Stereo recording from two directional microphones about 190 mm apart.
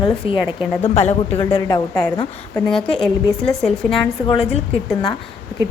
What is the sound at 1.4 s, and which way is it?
Speech, 20° left (ahead or behind).